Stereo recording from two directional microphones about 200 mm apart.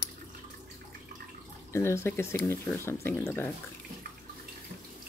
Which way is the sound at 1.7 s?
15° left (ahead or behind).